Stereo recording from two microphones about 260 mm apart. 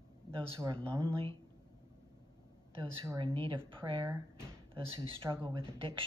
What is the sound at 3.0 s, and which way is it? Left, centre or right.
Speech, centre.